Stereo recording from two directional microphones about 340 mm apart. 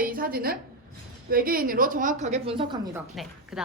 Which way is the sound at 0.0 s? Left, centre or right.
Right.